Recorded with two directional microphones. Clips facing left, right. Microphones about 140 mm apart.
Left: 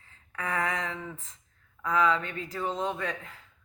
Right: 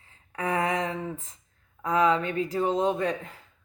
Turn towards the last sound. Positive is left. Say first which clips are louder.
# right 7 dB
turn(degrees=-35)  # may be behind; listen again after turning